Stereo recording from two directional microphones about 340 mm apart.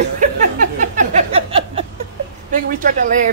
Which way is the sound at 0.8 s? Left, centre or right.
Centre.